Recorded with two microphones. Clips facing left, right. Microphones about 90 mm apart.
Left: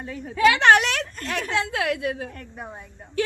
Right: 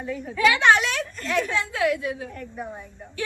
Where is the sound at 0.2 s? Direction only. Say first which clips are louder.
Left 2 dB; 50° left (ahead or behind).